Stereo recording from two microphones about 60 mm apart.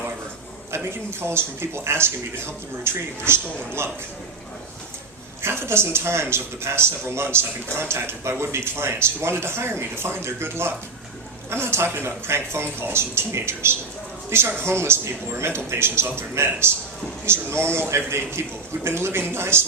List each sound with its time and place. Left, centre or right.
1.2 s speech: right
5.4 s speech: right